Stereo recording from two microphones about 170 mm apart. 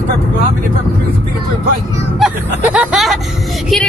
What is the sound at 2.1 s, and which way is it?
Speech, 5° right (ahead or behind).